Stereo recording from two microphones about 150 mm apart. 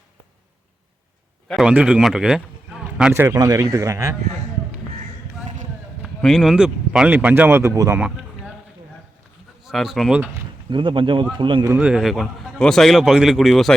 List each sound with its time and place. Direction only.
1.5 s speech: 5° right (ahead or behind)
3.1 s speech: 20° right (ahead or behind)
6.2 s speech: centre (ahead or behind); by 8.0 s 20° right (ahead or behind)
9.6 s a man's voice: centre (ahead or behind)
10.7 s speech: 30° right (ahead or behind)
11.6 s a man's voice: 15° right (ahead or behind)